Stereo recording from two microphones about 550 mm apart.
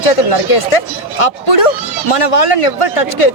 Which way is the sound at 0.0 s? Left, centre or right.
Left.